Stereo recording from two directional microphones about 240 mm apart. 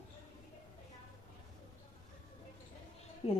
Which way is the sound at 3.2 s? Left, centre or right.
Left.